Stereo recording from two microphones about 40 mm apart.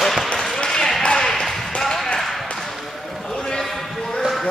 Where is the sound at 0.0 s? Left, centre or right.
Centre.